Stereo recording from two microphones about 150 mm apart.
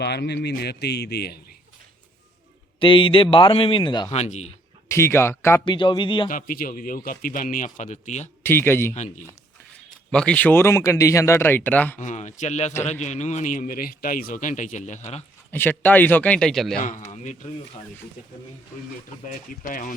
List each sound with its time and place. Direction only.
0.0 s speech: 90° left
2.7 s a man's voice: 35° left (ahead or behind)
4.1 s speech: 50° left (ahead or behind)
4.9 s speech: 15° left (ahead or behind)
5.6 s a man's voice: 30° left (ahead or behind)
6.2 s a man's voice: 65° left (ahead or behind); by 8.3 s 50° left (ahead or behind)
8.4 s speech: 15° left (ahead or behind)
10.1 s speech: 5° left (ahead or behind)
11.9 s a man's voice: 55° left (ahead or behind)
15.5 s speech: 15° left (ahead or behind)
16.8 s speech: 55° left (ahead or behind)
19.6 s a man's voice: 65° left (ahead or behind)